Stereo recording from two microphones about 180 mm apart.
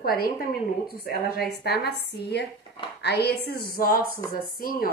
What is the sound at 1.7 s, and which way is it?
A woman's voice, 70° left (ahead or behind).